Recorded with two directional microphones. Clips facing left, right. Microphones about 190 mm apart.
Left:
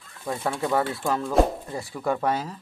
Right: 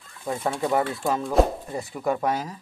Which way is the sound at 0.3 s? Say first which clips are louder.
Right 1 dB; 15° right (ahead or behind).